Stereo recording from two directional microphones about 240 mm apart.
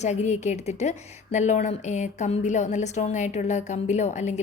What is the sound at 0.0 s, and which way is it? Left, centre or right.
A woman's voice, left.